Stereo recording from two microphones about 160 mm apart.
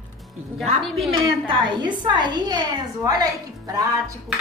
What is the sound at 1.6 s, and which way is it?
A woman's voice, 25° right (ahead or behind).